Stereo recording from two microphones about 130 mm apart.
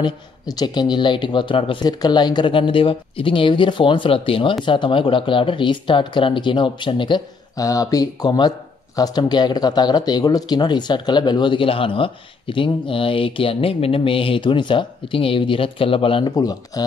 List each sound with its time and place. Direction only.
0.0 s speech: 30° left (ahead or behind)
7.5 s speech: 25° left (ahead or behind); by 16.3 s 40° left (ahead or behind)
16.3 s speech: 30° left (ahead or behind)